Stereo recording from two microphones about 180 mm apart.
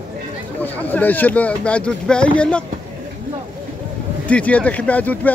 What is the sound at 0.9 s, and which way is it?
Speech, 10° left (ahead or behind).